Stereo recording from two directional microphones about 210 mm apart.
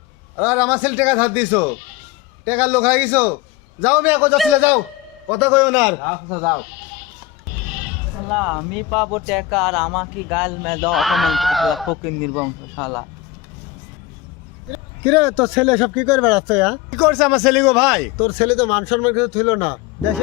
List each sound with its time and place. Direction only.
0.3 s a man's voice: 5° right (ahead or behind)
8.3 s speech: centre (ahead or behind)
15.0 s speech: 10° left (ahead or behind)
18.4 s speech: 30° left (ahead or behind)
19.2 s speech: 5° left (ahead or behind)